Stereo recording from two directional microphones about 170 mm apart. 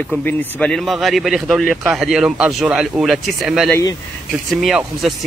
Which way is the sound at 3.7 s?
20° left (ahead or behind).